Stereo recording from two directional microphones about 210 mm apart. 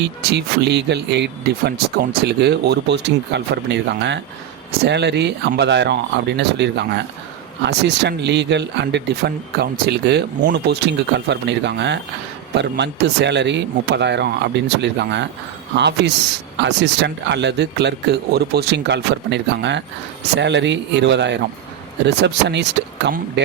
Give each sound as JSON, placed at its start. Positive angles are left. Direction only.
{"t": 0.0, "sound": "speech", "side_deg": -55}